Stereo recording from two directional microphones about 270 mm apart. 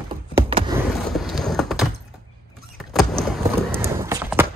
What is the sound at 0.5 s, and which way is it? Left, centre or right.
Vehicle, centre.